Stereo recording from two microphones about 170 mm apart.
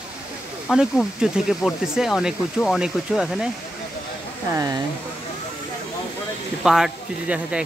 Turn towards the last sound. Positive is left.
turn(degrees=-5)  # may be behind; listen again after turning